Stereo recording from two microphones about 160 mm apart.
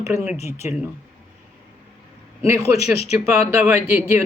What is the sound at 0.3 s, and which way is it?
Speech, 45° left (ahead or behind).